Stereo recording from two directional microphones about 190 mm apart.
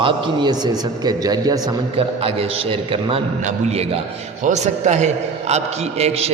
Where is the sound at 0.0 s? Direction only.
20° right (ahead or behind).